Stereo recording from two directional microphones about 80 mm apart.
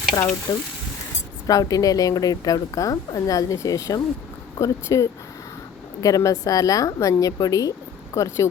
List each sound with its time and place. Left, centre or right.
0.1 s a woman's voice: left